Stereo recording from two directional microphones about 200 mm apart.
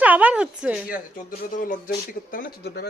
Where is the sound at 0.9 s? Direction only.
45° left (ahead or behind).